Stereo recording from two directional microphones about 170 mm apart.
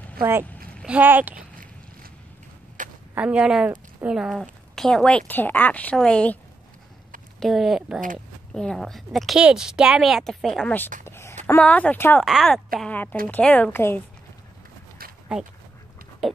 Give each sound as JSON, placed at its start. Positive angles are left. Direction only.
{"t": 0.2, "sound": "speech", "side_deg": -15}
{"t": 2.8, "sound": "a sound", "side_deg": -50}
{"t": 3.2, "sound": "a woman's voice", "side_deg": -5}
{"t": 7.3, "sound": "a woman's voice", "side_deg": 0}
{"t": 11.1, "sound": "a sound", "side_deg": 15}
{"t": 11.4, "sound": "speech", "side_deg": 10}
{"t": 12.3, "sound": "a woman's voice", "side_deg": 0}